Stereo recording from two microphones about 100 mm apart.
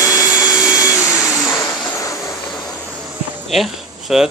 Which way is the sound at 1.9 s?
30° left (ahead or behind).